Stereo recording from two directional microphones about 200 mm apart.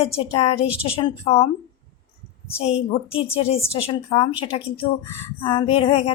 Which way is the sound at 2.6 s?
30° left (ahead or behind).